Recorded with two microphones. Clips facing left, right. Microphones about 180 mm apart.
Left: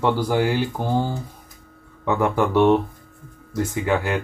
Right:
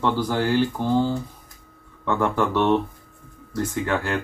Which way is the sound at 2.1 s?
10° left (ahead or behind).